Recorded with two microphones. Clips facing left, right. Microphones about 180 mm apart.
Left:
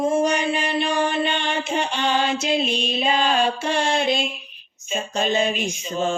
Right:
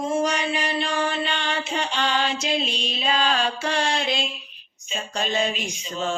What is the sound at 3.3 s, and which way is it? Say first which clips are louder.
Mantra: left 3 dB; 20° left (ahead or behind).